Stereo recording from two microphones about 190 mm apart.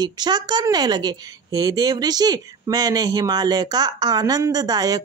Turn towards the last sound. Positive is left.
turn(degrees=-20)  # may be behind; listen again after turning